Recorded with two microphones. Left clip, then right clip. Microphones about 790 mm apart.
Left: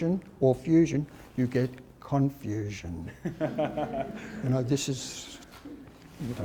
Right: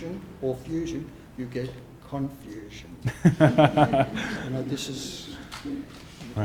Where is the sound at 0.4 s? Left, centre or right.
Left.